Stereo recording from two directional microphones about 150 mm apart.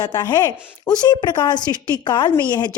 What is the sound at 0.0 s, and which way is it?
A woman's voice, 25° left (ahead or behind).